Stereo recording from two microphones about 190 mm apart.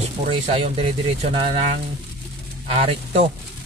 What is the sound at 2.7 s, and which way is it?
Speech, 30° right (ahead or behind).